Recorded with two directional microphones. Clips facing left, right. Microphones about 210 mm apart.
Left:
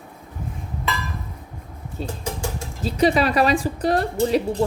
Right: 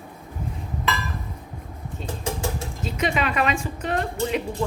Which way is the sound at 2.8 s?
35° left (ahead or behind).